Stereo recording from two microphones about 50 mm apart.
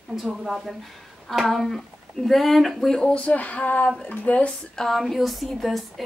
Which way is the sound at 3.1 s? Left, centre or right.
Left.